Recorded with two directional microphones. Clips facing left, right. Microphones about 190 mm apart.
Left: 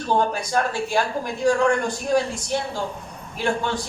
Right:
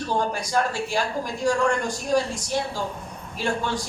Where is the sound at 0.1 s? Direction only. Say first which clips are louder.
Left 4 dB; 55° left (ahead or behind).